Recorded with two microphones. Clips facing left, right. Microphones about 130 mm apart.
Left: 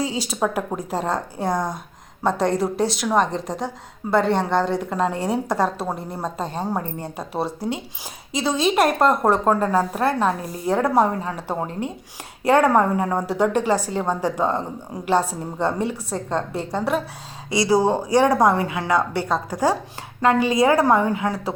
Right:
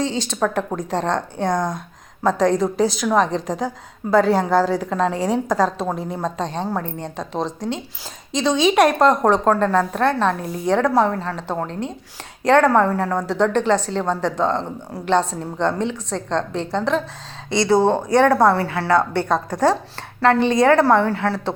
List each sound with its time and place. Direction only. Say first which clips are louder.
0.0 s a woman's voice: right 2 dB; 5° left (ahead or behind)
20.2 s a woman's voice: right 2 dB; 10° left (ahead or behind)